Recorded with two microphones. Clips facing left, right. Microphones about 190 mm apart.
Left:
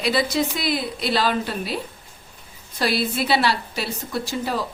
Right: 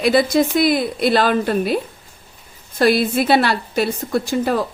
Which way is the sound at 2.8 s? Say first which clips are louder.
Right 7 dB; 50° right (ahead or behind).